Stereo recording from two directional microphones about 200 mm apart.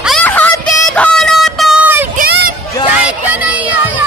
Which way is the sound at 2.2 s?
45° right (ahead or behind).